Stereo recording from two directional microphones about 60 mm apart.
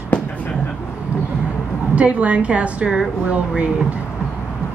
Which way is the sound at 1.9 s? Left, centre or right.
Right.